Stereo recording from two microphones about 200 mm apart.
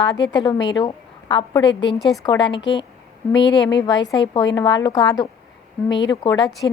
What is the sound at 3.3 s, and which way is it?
Speech, 65° left (ahead or behind).